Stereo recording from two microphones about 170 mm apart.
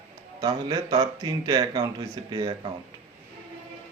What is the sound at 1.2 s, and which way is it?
Speech, 30° right (ahead or behind).